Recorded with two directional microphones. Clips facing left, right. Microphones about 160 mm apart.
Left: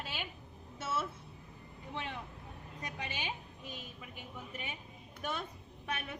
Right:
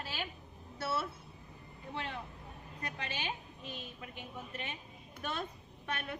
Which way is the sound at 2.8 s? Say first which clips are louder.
Right 1 dB; 15° left (ahead or behind).